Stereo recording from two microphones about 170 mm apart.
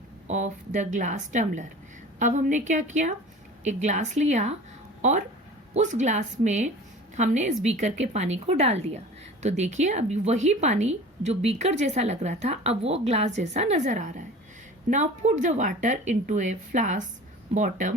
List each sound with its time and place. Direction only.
0.3 s a woman's voice: 45° right (ahead or behind)